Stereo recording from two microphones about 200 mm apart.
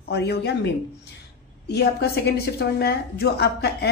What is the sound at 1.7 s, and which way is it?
A woman's voice, 55° left (ahead or behind).